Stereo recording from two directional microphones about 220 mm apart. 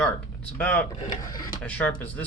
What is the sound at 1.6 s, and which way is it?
Speech, 5° left (ahead or behind).